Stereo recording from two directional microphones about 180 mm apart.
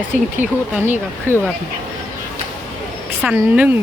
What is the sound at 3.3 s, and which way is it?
Speech, 10° right (ahead or behind).